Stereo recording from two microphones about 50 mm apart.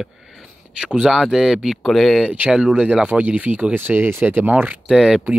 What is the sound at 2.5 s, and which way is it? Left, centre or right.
Speech, centre.